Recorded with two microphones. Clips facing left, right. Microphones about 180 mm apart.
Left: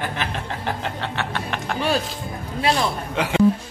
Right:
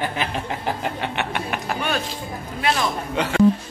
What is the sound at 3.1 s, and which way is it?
Speech, 10° left (ahead or behind).